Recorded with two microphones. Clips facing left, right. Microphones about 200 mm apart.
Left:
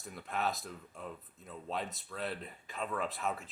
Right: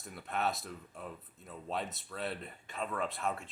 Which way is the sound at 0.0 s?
Centre (ahead or behind).